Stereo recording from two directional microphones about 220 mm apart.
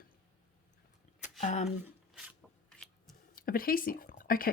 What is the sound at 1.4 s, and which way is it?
Speech, 30° left (ahead or behind).